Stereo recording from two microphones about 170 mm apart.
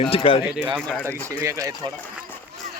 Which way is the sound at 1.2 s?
20° right (ahead or behind).